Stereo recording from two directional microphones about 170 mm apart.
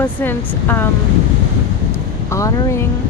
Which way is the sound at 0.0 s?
10° left (ahead or behind).